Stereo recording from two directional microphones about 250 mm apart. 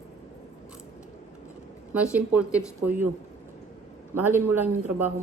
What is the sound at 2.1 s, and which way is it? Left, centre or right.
Speech, centre.